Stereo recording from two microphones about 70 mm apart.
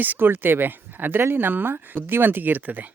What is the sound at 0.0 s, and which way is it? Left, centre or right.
Speech, right.